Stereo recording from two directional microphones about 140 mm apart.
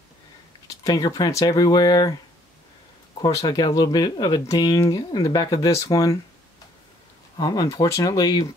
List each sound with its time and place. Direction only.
0.7 s speech: 25° left (ahead or behind)
3.3 s speech: 25° left (ahead or behind)
7.3 s speech: 25° left (ahead or behind)